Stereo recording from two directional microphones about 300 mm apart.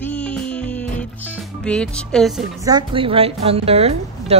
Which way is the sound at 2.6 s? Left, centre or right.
Centre.